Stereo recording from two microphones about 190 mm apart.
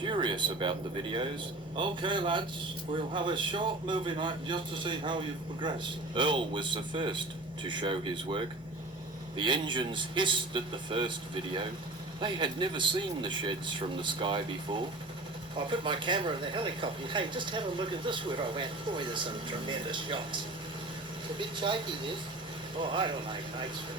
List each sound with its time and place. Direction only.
0.0 s a sound: 25° right (ahead or behind)
1.7 s speech: 25° right (ahead or behind)
12.2 s speech: 25° right (ahead or behind)